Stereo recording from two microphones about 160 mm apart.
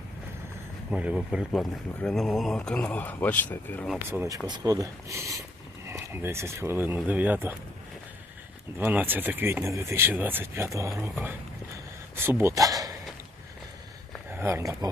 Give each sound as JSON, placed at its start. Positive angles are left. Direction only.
{"t": 0.9, "sound": "speech", "side_deg": -5}
{"t": 4.1, "sound": "speech", "side_deg": -15}
{"t": 8.8, "sound": "speech", "side_deg": -10}
{"t": 12.1, "sound": "a sound", "side_deg": -15}
{"t": 14.3, "sound": "speech", "side_deg": -15}